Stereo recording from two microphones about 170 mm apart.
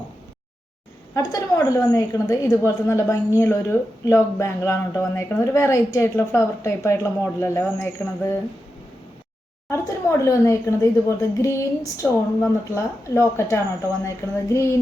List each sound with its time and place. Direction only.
1.1 s speech: 20° left (ahead or behind)
9.6 s speech: 15° left (ahead or behind)